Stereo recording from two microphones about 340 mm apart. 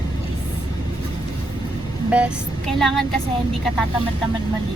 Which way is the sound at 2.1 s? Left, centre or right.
Centre.